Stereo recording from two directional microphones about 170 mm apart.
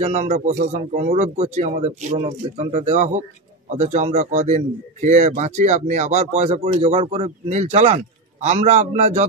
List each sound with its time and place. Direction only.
0.0 s a man's voice: 40° right (ahead or behind)